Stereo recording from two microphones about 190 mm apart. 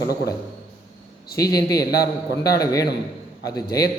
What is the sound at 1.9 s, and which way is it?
Speech, 55° left (ahead or behind).